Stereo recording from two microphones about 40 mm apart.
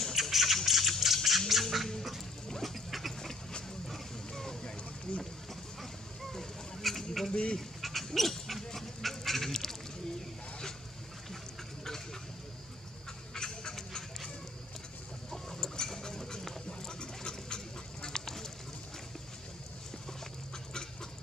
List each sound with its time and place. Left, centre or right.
0.1 s scratching: centre
0.7 s a sound: centre
1.5 s bird: centre
2.4 s pig: centre
2.7 s pig: centre
4.3 s boat: centre
5.1 s a sound: left
6.3 s fowl: centre
7.5 s goose: centre
13.3 s duck: centre
15.3 s a sound: centre
18.0 s duck: centre